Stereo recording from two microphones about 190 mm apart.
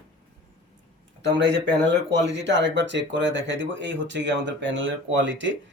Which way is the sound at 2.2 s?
65° right (ahead or behind).